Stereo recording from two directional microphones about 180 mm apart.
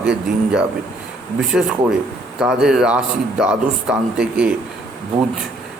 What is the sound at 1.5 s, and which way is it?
A man's voice, centre (ahead or behind).